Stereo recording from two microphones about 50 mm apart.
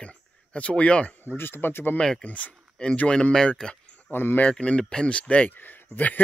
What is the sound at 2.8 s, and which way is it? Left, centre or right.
Speech, centre.